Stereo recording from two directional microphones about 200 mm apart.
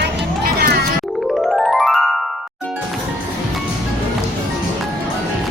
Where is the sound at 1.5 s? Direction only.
Centre (ahead or behind).